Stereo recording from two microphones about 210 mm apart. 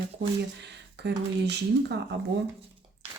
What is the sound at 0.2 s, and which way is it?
Speech, 55° right (ahead or behind).